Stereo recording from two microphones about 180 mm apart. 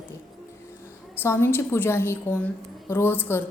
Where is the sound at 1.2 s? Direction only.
15° left (ahead or behind).